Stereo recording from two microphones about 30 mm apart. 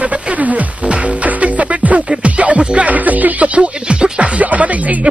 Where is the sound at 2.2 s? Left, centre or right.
Right.